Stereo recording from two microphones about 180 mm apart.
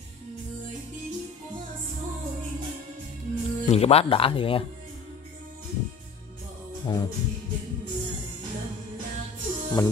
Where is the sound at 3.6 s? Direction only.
35° left (ahead or behind).